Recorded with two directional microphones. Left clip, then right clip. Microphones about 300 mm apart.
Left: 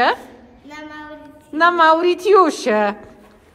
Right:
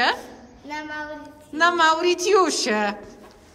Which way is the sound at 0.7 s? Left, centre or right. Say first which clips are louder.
Right 3 dB; right.